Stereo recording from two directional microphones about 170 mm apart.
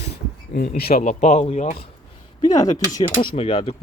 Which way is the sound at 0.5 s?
65° left (ahead or behind).